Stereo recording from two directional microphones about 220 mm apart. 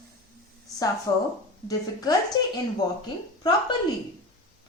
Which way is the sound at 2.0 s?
20° left (ahead or behind).